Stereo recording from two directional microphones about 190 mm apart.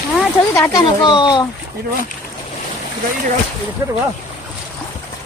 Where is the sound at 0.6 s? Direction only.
20° left (ahead or behind).